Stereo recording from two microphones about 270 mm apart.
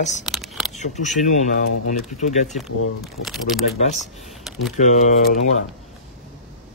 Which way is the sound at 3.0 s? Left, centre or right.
Centre.